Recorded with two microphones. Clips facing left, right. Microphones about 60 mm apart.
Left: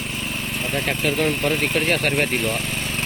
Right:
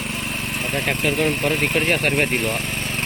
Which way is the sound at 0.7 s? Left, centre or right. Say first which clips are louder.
Right 1 dB; centre.